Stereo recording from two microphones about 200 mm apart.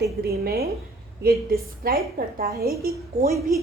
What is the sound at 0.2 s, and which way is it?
Speech, 50° right (ahead or behind).